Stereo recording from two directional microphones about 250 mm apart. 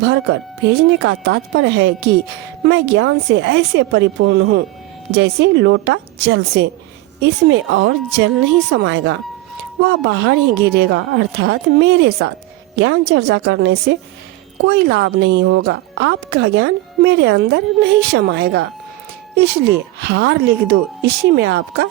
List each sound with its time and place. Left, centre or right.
0.0 s a woman's voice: right